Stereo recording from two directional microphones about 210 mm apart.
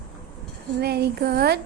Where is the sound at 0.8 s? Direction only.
50° right (ahead or behind).